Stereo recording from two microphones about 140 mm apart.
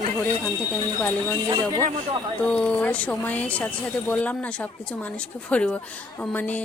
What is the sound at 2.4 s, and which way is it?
Speech, 5° left (ahead or behind).